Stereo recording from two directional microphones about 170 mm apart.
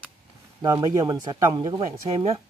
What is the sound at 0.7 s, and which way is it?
Speech, 20° right (ahead or behind).